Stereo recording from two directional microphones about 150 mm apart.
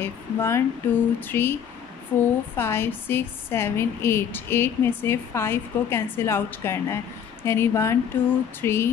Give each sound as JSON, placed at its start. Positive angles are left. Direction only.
{"t": 0.0, "sound": "a woman's voice", "side_deg": 15}